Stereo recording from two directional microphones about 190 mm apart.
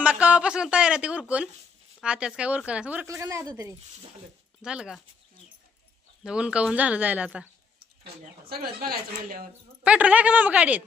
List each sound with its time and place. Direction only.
0.0 s a woman's voice: 5° right (ahead or behind)
4.6 s speech: 5° right (ahead or behind)
6.2 s a woman's voice: 5° right (ahead or behind)
8.4 s speech: 55° right (ahead or behind)
9.8 s a woman's voice: 5° right (ahead or behind)